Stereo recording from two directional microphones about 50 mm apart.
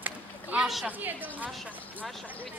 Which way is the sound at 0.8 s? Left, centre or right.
Right.